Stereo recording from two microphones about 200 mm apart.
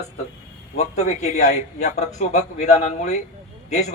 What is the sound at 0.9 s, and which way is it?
Speech, 35° left (ahead or behind).